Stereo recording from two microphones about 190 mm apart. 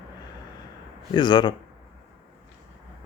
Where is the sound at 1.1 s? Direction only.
25° left (ahead or behind).